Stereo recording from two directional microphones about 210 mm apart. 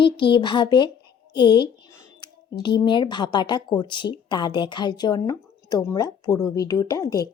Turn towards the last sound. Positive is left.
turn(degrees=15)  # may be behind; listen again after turning